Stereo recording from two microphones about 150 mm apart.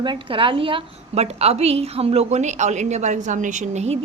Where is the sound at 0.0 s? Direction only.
35° right (ahead or behind).